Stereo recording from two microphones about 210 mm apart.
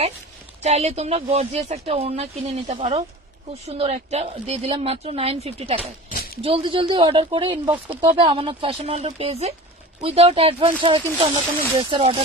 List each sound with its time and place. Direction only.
0.6 s speech: 30° right (ahead or behind)
6.0 s a sound: 45° left (ahead or behind)
6.4 s speech: 25° right (ahead or behind)